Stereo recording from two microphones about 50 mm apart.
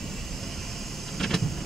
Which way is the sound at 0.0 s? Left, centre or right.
Centre.